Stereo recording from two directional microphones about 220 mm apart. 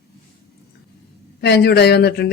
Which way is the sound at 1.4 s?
50° left (ahead or behind).